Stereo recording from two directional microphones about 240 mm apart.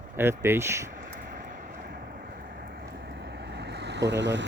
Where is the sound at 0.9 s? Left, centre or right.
Right.